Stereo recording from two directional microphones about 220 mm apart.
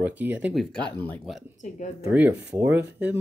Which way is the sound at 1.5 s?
35° left (ahead or behind).